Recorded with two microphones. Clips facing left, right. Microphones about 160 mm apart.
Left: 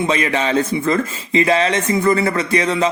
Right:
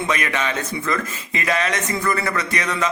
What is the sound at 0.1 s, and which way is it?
Speech, 30° left (ahead or behind).